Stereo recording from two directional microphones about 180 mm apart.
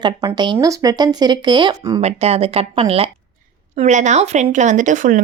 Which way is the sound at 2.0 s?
35° right (ahead or behind).